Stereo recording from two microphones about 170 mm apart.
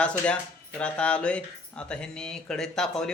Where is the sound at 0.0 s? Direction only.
5° left (ahead or behind).